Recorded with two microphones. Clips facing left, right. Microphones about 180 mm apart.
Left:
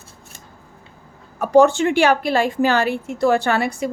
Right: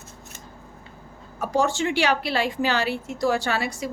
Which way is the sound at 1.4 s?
60° left (ahead or behind).